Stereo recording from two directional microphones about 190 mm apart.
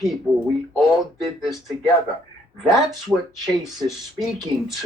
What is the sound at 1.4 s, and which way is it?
Speech, centre (ahead or behind).